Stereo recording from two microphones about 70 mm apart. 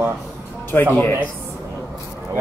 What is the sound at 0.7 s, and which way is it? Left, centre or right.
Speech, left.